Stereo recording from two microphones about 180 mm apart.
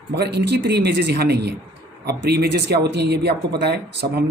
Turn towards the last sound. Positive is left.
turn(degrees=-70)  # may be behind; listen again after turning